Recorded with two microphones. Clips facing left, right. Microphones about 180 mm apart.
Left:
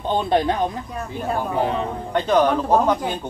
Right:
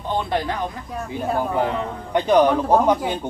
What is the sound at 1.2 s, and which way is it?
Speech, 5° right (ahead or behind).